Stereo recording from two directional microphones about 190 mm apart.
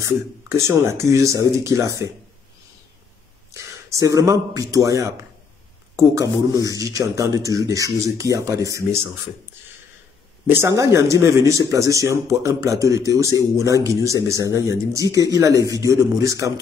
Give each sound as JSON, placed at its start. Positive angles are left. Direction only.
{"t": 0.7, "sound": "speech", "side_deg": -15}
{"t": 3.5, "sound": "speech", "side_deg": -15}
{"t": 10.4, "sound": "speech", "side_deg": -10}